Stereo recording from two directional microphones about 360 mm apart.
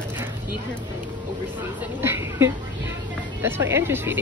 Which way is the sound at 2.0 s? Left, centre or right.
Centre.